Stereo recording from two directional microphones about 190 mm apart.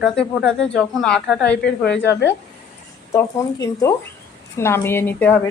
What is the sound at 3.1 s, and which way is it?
A woman's voice, 15° left (ahead or behind).